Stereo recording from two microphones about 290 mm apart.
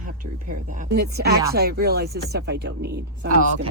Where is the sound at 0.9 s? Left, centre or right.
Right.